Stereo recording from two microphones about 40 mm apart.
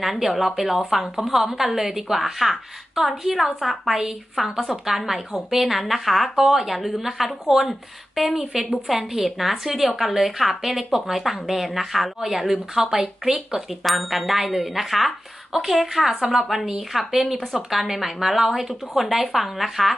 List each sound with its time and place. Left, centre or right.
0.0 s a woman's voice: centre
4.4 s a woman's voice: centre